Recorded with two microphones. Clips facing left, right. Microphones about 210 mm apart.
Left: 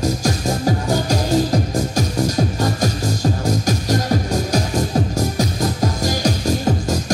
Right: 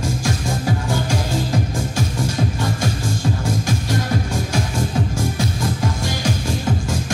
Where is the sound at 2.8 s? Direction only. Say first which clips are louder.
Left 3 dB; 40° left (ahead or behind).